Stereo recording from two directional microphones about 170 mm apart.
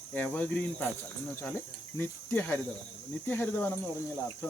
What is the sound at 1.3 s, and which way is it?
Cricket, 10° left (ahead or behind).